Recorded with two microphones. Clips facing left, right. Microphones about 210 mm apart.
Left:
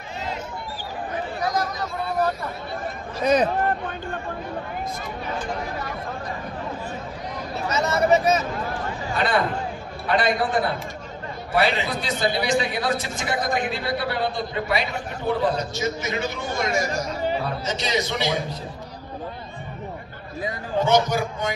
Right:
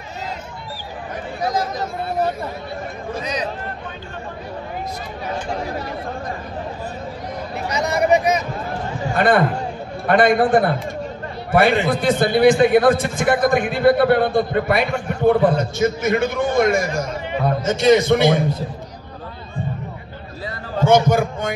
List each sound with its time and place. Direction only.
1.4 s speech: 25° right (ahead or behind)
3.3 s speech: 55° left (ahead or behind)
7.7 s speech: 15° right (ahead or behind)
9.1 s a man's voice: 55° right (ahead or behind)
20.8 s a man's voice: 50° right (ahead or behind)